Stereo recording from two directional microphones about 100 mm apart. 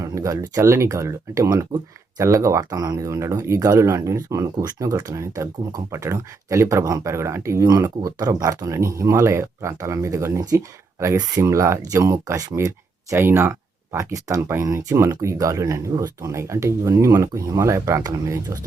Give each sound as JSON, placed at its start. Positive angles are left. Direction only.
{"t": 0.0, "sound": "speech", "side_deg": -30}